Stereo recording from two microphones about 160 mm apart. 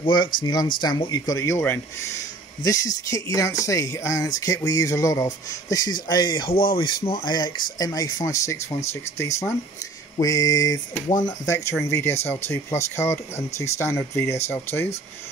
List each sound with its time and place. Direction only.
0.0 s speech: 30° left (ahead or behind)